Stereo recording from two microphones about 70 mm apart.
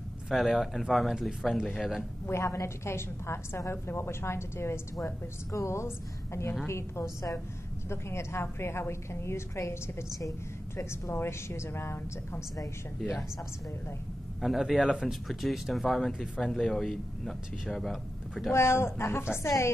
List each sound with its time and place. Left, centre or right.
0.3 s speech: centre
2.4 s a woman's voice: left
14.4 s speech: centre
18.5 s a woman's voice: left